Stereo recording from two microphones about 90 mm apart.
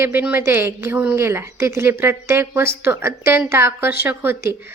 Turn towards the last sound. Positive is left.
turn(degrees=-25)  # may be behind; listen again after turning